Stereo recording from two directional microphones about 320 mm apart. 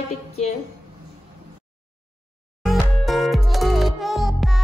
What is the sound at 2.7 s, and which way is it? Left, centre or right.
Music, centre.